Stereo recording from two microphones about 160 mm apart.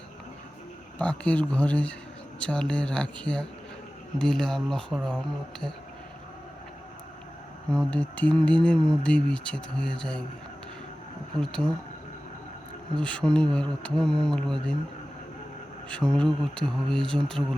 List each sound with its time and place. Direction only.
0.9 s speech: 10° left (ahead or behind)
7.7 s speech: 5° left (ahead or behind)
11.3 s speech: 5° left (ahead or behind)
13.0 s speech: 5° left (ahead or behind)
15.9 s speech: 5° left (ahead or behind)